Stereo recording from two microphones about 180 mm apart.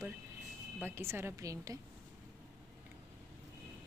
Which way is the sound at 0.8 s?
15° right (ahead or behind).